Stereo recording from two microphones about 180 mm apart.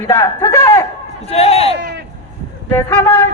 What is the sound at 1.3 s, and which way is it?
Speech, 35° left (ahead or behind).